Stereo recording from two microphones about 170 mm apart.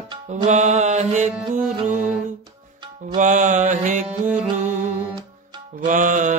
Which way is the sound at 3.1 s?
50° right (ahead or behind).